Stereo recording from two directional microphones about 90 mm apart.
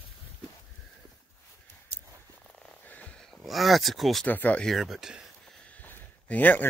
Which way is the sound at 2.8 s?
15° left (ahead or behind).